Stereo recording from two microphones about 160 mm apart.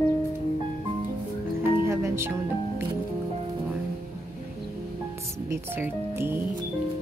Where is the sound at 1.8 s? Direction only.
15° right (ahead or behind).